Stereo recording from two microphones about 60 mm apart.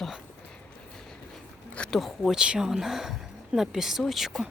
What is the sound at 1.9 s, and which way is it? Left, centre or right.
Speech, centre.